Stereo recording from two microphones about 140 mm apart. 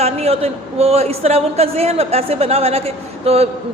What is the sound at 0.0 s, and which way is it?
A man's voice, 50° right (ahead or behind).